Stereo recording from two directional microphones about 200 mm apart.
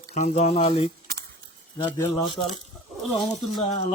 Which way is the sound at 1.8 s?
15° left (ahead or behind).